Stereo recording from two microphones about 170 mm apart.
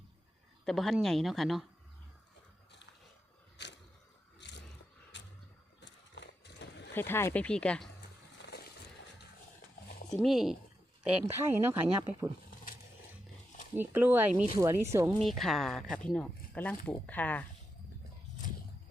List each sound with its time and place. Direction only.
0.6 s speech: centre (ahead or behind)
3.6 s a sound: 90° left
5.8 s horse: 90° left
6.9 s speech: 15° left (ahead or behind)
8.4 s a sound: 80° left
10.2 s speech: centre (ahead or behind)
13.7 s speech: 10° right (ahead or behind)
15.2 s speech: centre (ahead or behind)